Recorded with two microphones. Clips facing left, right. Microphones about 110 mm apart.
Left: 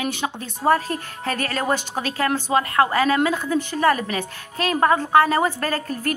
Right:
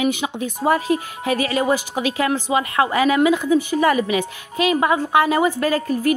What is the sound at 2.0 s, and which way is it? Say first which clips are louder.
Speech: right 3 dB; 45° left (ahead or behind).